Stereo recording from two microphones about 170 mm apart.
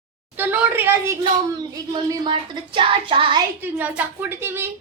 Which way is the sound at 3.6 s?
10° right (ahead or behind).